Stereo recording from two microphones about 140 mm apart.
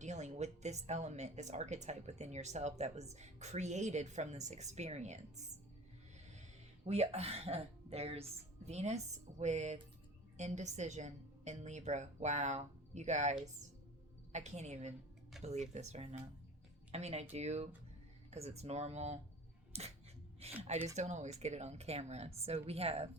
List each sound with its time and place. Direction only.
0.0 s a woman's voice: 55° right (ahead or behind)
6.8 s a woman's voice: 50° right (ahead or behind)
19.7 s coin: 50° right (ahead or behind)
20.6 s speech: 50° right (ahead or behind)